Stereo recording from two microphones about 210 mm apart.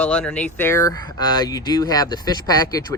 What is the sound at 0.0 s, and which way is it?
Speech, 5° left (ahead or behind).